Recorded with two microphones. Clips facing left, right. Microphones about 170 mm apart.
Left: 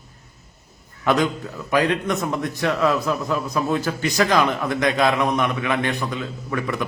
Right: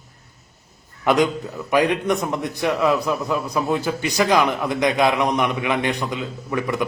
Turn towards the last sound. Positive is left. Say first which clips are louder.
# right 2 dB
turn(degrees=-15)  # may be behind; listen again after turning